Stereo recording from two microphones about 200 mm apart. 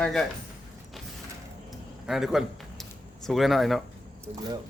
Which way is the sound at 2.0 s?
Centre (ahead or behind).